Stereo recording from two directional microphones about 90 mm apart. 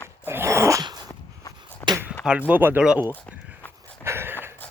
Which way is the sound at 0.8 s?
50° right (ahead or behind).